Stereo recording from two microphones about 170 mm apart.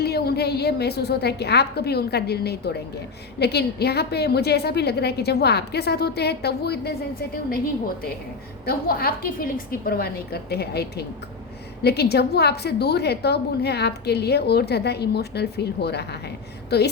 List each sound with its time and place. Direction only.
0.0 s a woman's voice: 70° left (ahead or behind)
8.6 s a woman's voice: 65° left (ahead or behind)